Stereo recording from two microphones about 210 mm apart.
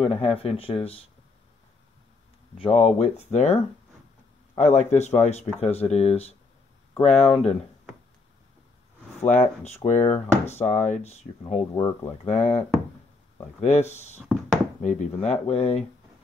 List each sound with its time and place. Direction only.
0.0 s speech: 30° left (ahead or behind)
2.6 s speech: 30° left (ahead or behind)
4.6 s speech: 35° left (ahead or behind)
9.2 s speech: 35° left (ahead or behind)
11.7 s speech: 15° left (ahead or behind)
12.3 s speech: 35° left (ahead or behind)
14.2 s a sound: centre (ahead or behind)
14.8 s speech: 35° left (ahead or behind)